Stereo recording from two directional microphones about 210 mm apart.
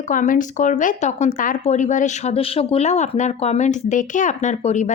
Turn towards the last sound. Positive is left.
turn(degrees=35)  # may be behind; listen again after turning